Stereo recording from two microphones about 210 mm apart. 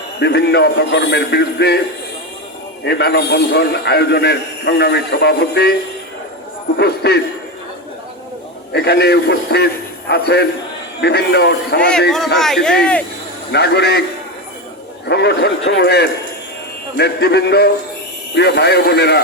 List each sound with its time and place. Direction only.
0.2 s a man's voice: 55° left (ahead or behind)
2.8 s a man's voice: 50° left (ahead or behind)
6.7 s a man's voice: 50° left (ahead or behind)
8.7 s a man's voice: 50° left (ahead or behind)
12.4 s a man's voice: centre (ahead or behind)
13.5 s a man's voice: 55° left (ahead or behind)
15.0 s a man's voice: 50° left (ahead or behind)